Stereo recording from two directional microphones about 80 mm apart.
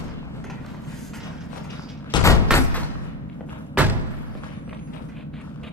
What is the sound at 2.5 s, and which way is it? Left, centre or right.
Door, centre.